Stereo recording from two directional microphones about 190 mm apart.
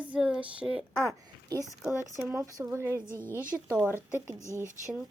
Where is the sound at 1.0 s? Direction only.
20° right (ahead or behind).